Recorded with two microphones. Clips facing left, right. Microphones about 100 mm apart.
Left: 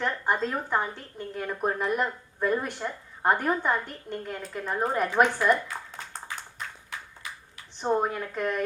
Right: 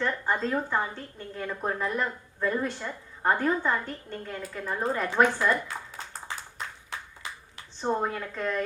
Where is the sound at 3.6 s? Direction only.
15° left (ahead or behind).